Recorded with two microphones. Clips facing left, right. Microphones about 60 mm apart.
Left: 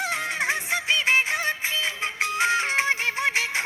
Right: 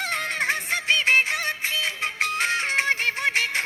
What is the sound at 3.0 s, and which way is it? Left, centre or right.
Music, right.